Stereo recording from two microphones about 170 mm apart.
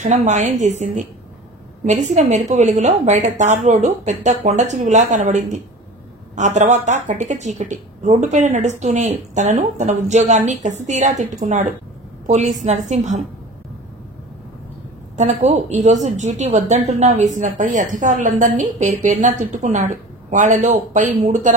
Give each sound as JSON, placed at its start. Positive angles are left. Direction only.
{"t": 0.0, "sound": "a woman's voice", "side_deg": -45}
{"t": 15.1, "sound": "a woman's voice", "side_deg": -40}